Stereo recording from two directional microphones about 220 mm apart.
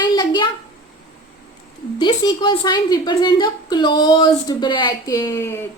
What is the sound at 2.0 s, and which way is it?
A woman's voice, 20° left (ahead or behind).